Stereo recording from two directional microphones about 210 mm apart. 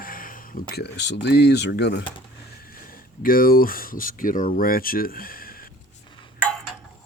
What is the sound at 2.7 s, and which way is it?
Speech, 45° left (ahead or behind).